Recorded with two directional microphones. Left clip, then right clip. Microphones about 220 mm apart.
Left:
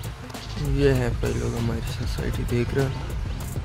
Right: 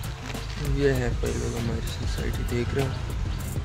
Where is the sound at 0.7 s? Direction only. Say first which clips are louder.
Left 3 dB; 20° left (ahead or behind).